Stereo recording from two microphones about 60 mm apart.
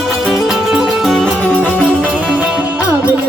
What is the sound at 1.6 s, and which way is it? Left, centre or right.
Music, centre.